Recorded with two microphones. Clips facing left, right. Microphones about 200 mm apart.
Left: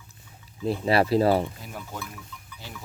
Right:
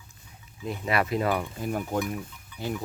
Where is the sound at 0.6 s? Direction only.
30° left (ahead or behind).